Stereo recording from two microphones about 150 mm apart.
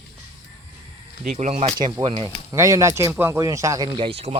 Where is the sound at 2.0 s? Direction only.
35° right (ahead or behind).